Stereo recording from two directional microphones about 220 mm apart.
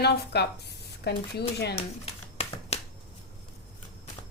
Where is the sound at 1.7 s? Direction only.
25° left (ahead or behind).